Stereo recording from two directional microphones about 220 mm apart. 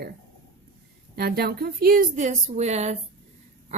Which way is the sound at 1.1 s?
45° right (ahead or behind).